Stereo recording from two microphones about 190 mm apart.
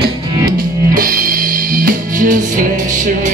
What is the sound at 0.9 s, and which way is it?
Music, 45° right (ahead or behind).